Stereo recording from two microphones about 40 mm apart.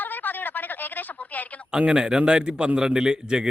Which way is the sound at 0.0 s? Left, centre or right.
Left.